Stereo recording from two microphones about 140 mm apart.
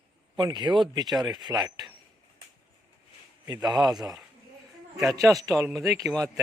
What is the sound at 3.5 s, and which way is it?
Speech, 30° right (ahead or behind).